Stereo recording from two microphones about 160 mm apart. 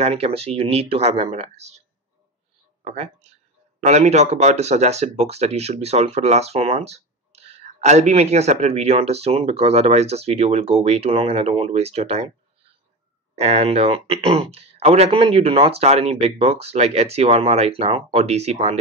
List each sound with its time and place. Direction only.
0.0 s speech: 40° right (ahead or behind)
2.8 s speech: 45° right (ahead or behind)
13.4 s speech: 40° right (ahead or behind)